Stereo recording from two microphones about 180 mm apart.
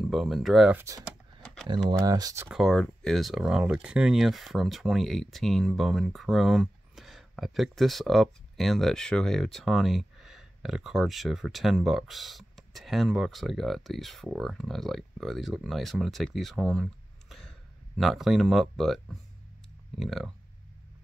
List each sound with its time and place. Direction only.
0.0 s speech: centre (ahead or behind)
1.4 s typing: 5° left (ahead or behind)
1.9 s speech: 20° right (ahead or behind)
2.5 s speech: centre (ahead or behind)